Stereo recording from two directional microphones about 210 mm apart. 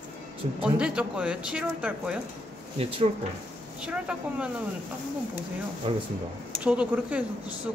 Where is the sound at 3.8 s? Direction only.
5° right (ahead or behind).